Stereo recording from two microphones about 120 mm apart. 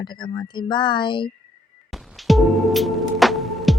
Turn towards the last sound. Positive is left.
turn(degrees=0)  # may be behind; listen again after turning